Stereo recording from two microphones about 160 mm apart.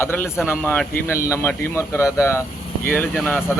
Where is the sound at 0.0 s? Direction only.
15° left (ahead or behind).